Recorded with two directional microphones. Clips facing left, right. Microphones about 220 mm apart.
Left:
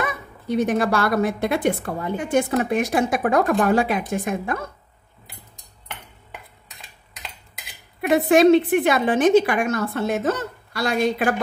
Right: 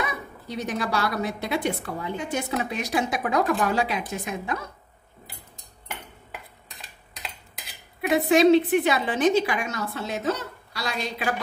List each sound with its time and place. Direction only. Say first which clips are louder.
0.0 s a woman's voice: left 3 dB; 55° left (ahead or behind)
8.3 s a woman's voice: left 3 dB; 55° left (ahead or behind)